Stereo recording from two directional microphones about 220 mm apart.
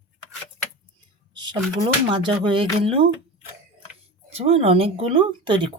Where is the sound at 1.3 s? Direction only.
20° right (ahead or behind).